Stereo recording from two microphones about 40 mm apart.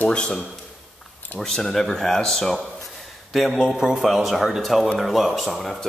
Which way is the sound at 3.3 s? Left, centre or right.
Centre.